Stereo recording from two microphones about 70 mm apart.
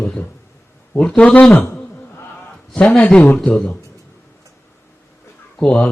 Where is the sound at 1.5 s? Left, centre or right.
Left.